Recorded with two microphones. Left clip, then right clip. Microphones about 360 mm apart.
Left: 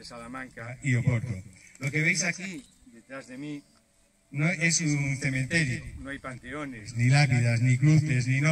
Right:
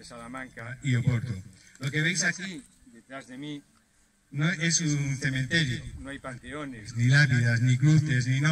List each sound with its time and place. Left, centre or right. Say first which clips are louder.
0.0 s a man's voice: even; centre